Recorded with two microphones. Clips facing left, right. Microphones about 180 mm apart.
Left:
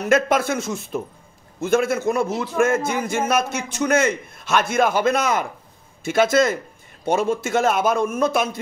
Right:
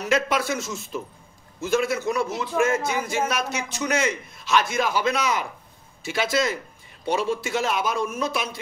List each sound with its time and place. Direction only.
0.0 s a man's voice: 50° left (ahead or behind)